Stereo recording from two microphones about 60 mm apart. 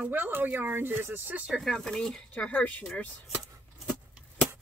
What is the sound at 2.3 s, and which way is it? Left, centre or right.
Speech, left.